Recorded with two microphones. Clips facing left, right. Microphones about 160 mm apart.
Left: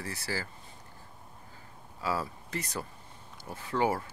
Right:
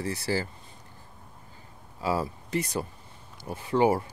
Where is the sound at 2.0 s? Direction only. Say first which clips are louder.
Right 5 dB; 20° right (ahead or behind).